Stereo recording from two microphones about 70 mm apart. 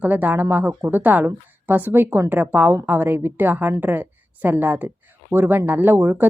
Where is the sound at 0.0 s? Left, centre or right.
Right.